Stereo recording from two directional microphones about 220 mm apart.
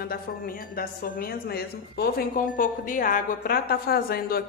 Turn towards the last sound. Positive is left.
turn(degrees=45)  # may be behind; listen again after turning